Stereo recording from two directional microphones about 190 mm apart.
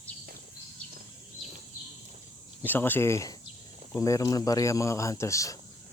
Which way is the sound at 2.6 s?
10° left (ahead or behind).